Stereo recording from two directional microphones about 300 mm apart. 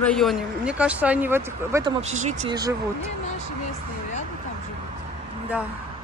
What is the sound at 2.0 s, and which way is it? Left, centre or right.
Speech, right.